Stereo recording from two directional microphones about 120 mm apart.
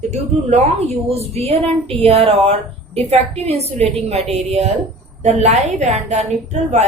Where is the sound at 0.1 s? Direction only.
65° right (ahead or behind).